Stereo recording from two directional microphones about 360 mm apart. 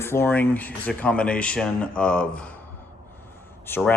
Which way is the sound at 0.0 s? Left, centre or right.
Centre.